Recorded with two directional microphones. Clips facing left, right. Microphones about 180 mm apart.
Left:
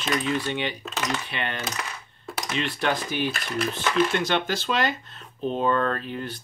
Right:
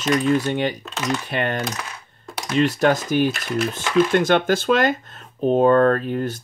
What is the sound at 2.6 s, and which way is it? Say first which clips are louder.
Speech: right 9 dB; 45° right (ahead or behind).